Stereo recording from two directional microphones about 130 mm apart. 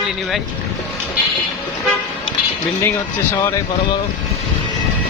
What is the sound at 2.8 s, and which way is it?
Speech, 20° left (ahead or behind).